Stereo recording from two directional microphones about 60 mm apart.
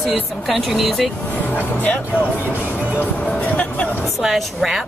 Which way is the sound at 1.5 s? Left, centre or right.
Left.